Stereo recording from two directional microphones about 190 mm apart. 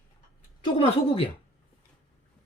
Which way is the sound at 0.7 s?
30° left (ahead or behind).